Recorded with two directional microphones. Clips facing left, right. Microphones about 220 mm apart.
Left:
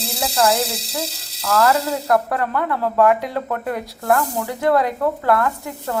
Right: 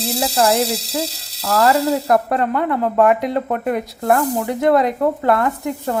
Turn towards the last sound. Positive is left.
turn(degrees=-20)  # may be behind; listen again after turning